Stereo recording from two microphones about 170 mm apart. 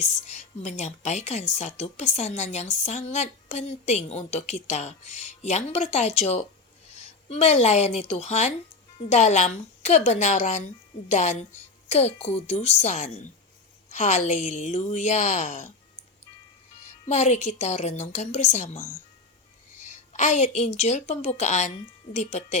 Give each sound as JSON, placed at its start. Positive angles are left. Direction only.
{"t": 0.3, "sound": "a woman's voice", "side_deg": 40}
{"t": 17.1, "sound": "a woman's voice", "side_deg": 40}